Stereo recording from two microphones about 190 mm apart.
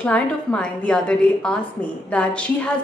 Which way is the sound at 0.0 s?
5° left (ahead or behind).